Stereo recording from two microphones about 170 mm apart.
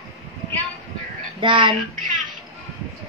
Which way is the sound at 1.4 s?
30° right (ahead or behind).